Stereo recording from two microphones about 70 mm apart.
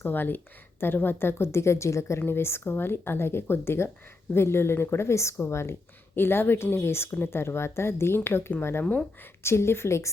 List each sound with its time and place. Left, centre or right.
0.0 s speech: left